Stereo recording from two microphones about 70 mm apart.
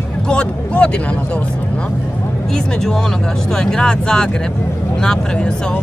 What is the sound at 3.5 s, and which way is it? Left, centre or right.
Speech, centre.